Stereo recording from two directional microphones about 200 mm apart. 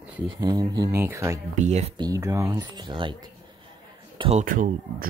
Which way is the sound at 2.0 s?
15° right (ahead or behind).